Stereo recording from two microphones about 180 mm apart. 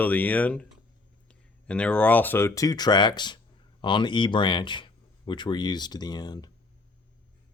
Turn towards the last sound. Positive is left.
turn(degrees=20)  # may be behind; listen again after turning